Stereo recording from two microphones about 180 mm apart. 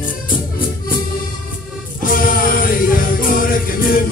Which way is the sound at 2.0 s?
50° left (ahead or behind).